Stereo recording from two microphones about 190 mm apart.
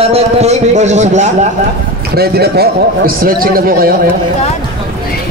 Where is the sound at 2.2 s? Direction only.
55° right (ahead or behind).